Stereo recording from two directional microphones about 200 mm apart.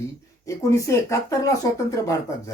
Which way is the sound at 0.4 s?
15° left (ahead or behind).